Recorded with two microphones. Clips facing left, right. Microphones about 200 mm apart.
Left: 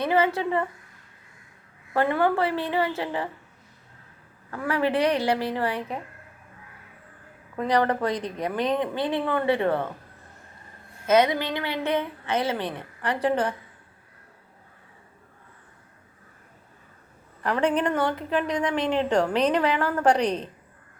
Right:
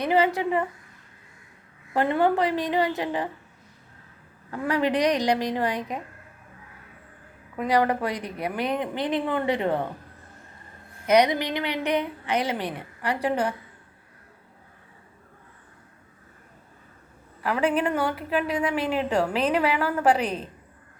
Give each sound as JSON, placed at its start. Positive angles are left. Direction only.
{"t": 0.0, "sound": "a woman's voice", "side_deg": -15}
{"t": 1.9, "sound": "a woman's voice", "side_deg": -20}
{"t": 4.5, "sound": "a woman's voice", "side_deg": -15}
{"t": 7.5, "sound": "a woman's voice", "side_deg": -10}
{"t": 11.0, "sound": "a woman's voice", "side_deg": -15}
{"t": 17.4, "sound": "a woman's voice", "side_deg": -5}